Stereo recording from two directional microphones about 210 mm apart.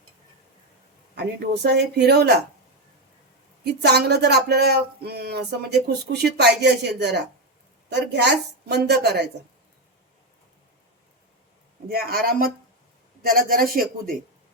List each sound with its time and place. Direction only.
1.6 s speech: 50° right (ahead or behind)
3.6 s a woman's voice: 50° right (ahead or behind)
11.9 s speech: 45° right (ahead or behind)